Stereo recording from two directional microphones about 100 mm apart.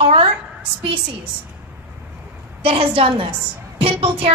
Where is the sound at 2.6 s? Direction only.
65° right (ahead or behind).